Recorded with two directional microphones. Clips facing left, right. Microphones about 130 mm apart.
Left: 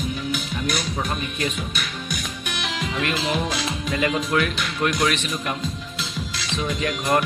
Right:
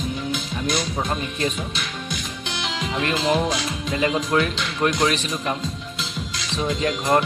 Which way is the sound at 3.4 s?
25° right (ahead or behind).